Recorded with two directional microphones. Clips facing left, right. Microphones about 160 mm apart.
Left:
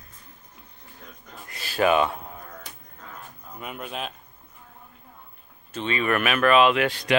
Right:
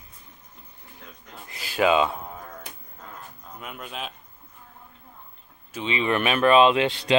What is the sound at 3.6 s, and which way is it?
Speech, centre (ahead or behind).